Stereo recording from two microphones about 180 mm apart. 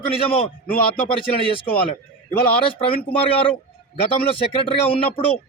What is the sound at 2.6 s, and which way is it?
Speech, 30° left (ahead or behind).